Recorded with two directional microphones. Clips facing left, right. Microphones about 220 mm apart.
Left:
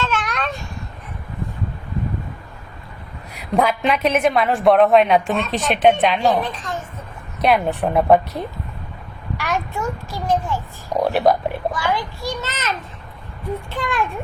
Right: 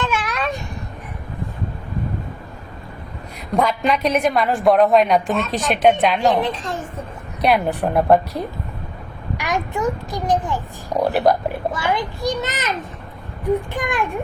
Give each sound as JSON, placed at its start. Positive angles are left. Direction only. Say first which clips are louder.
{"t": 0.0, "sound": "a sound", "louder": "right 1 dB", "side_deg": -10}
{"t": 3.6, "sound": "a woman's voice", "louder": "left 1 dB", "side_deg": 5}
{"t": 6.4, "sound": "a woman's voice", "louder": "right 4 dB", "side_deg": -25}
{"t": 7.4, "sound": "a woman's voice", "louder": "even", "side_deg": 0}
{"t": 9.4, "sound": "a child's voice", "louder": "right 3 dB", "side_deg": -15}
{"t": 11.0, "sound": "a woman's voice", "louder": "even", "side_deg": 0}
{"t": 11.7, "sound": "a child's voice", "louder": "right 1 dB", "side_deg": -20}
{"t": 13.7, "sound": "a child's voice", "louder": "right 1 dB", "side_deg": -15}